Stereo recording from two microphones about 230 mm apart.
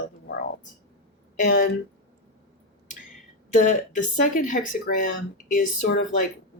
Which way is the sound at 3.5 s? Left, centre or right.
Left.